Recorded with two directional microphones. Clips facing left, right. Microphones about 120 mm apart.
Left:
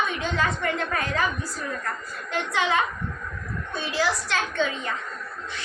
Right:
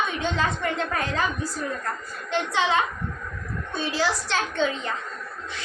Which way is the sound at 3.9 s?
30° right (ahead or behind).